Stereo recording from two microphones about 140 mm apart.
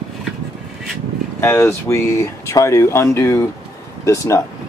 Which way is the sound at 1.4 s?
20° left (ahead or behind).